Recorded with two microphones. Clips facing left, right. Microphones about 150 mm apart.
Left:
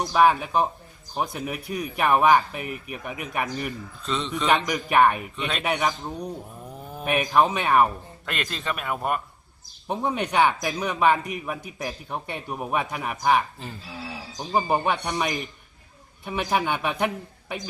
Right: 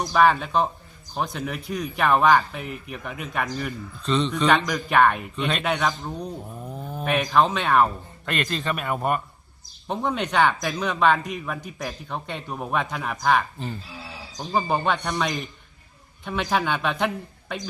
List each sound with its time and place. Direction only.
0.0 s a man's voice: 10° left (ahead or behind)
4.6 s a man's voice: 15° left (ahead or behind)
5.4 s a man's voice: centre (ahead or behind)
5.6 s a man's voice: 15° left (ahead or behind)
8.3 s a man's voice: centre (ahead or behind)
9.8 s a man's voice: 10° left (ahead or behind)
14.5 s a man's voice: 15° left (ahead or behind)